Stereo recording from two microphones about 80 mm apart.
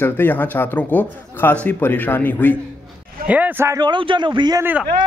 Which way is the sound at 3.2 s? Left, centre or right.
Centre.